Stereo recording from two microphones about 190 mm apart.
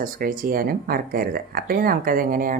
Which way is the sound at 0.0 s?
45° right (ahead or behind).